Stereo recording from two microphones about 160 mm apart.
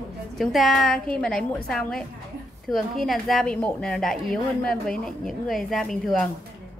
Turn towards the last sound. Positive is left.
turn(degrees=5)  # may be behind; listen again after turning